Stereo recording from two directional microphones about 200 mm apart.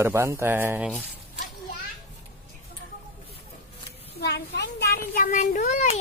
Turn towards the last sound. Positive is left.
turn(degrees=35)  # may be behind; listen again after turning